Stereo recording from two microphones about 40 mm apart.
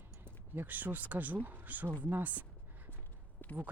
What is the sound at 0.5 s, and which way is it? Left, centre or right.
Speech, right.